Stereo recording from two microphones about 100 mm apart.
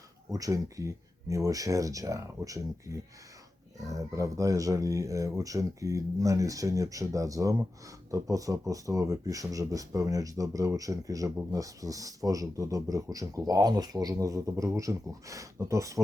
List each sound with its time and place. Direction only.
0.3 s speech: 35° right (ahead or behind)